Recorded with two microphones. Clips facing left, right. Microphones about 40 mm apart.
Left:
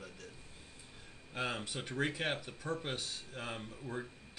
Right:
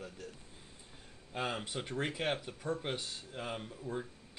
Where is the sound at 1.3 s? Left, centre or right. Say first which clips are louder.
Right 1 dB; centre.